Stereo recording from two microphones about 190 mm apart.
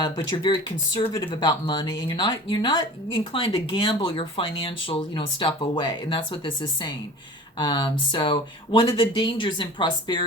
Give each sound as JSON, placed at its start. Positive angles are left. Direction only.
{"t": 0.0, "sound": "speech", "side_deg": 25}